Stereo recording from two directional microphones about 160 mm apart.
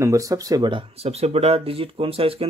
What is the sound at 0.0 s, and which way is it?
Speech, 20° right (ahead or behind).